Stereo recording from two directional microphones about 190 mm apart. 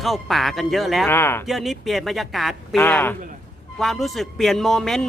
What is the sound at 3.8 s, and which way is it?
Speech, centre (ahead or behind).